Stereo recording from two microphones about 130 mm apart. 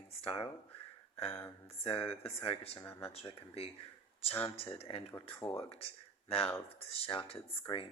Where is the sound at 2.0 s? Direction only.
45° left (ahead or behind).